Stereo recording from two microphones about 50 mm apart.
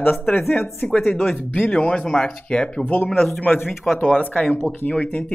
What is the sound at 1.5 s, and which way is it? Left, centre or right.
Speech, left.